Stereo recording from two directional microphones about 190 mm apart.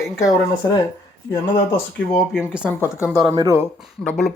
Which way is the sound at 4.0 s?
5° left (ahead or behind).